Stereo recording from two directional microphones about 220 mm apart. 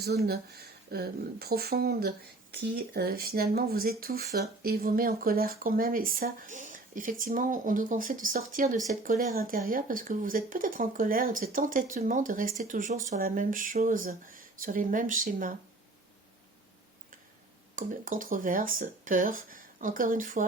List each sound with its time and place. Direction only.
0.0 s speech: 45° right (ahead or behind)
17.7 s speech: 35° right (ahead or behind)